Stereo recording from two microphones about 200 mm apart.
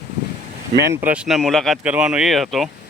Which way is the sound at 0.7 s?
55° right (ahead or behind).